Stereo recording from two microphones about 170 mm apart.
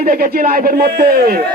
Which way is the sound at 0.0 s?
60° right (ahead or behind).